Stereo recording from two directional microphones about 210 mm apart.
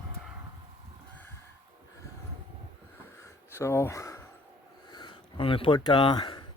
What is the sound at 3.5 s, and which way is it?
Speech, 10° left (ahead or behind).